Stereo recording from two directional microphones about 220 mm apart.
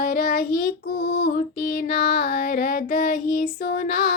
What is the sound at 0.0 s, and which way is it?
Child singing, 40° left (ahead or behind).